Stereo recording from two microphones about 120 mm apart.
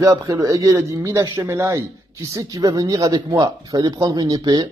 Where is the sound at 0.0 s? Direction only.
30° right (ahead or behind).